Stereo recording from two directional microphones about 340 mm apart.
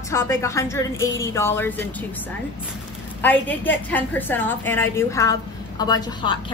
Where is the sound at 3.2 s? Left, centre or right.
Centre.